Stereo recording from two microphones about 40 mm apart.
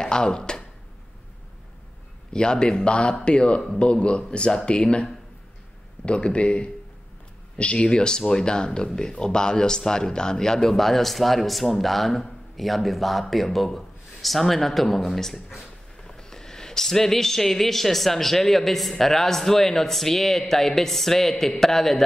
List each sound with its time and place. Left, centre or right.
0.0 s a sound: centre
2.3 s speech: left
6.0 s a man's voice: left; by 15.1 s centre
16.1 s speech: centre